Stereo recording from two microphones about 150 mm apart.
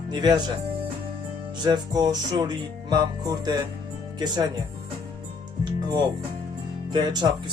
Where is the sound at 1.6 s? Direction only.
25° right (ahead or behind).